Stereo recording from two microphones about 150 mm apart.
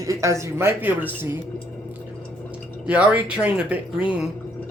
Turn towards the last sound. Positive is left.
turn(degrees=-5)  # may be behind; listen again after turning